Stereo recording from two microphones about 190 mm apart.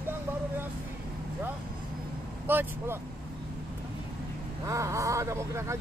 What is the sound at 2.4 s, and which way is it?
Speech, 10° right (ahead or behind).